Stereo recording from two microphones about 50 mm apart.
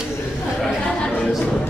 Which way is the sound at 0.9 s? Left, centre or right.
Centre.